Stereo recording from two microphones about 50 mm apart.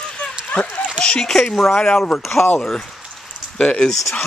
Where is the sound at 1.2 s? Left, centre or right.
Centre.